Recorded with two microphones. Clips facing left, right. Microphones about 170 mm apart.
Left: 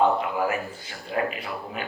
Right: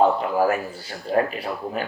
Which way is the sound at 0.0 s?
35° right (ahead or behind).